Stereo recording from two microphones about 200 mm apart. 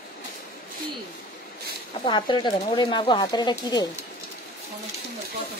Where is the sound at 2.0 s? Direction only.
20° left (ahead or behind).